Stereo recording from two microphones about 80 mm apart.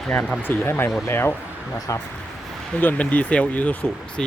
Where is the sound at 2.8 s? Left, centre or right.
Centre.